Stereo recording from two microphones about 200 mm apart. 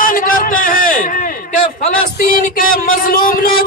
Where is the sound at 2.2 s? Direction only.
45° left (ahead or behind).